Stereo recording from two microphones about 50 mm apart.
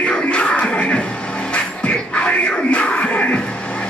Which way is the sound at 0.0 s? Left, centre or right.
Left.